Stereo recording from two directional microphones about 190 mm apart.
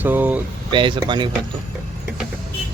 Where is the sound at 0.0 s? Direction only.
10° right (ahead or behind).